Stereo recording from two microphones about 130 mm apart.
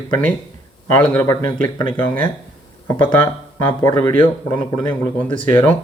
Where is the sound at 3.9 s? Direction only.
15° left (ahead or behind).